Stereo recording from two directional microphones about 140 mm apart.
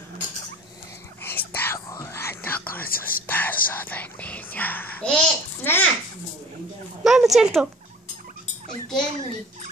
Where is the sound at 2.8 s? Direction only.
90° left.